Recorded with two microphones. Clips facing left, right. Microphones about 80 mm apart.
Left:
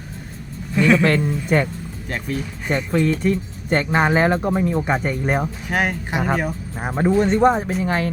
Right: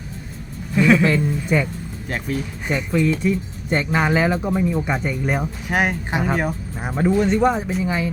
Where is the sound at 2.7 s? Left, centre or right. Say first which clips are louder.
Left 1 dB; left.